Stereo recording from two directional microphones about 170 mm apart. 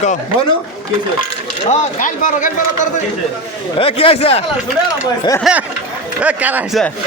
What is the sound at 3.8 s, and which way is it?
Speech, 35° left (ahead or behind).